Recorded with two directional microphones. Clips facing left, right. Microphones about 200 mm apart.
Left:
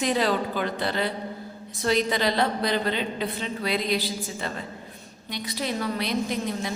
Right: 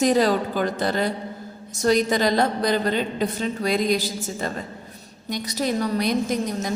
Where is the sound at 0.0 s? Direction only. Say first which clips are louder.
Right 5 dB; 40° right (ahead or behind).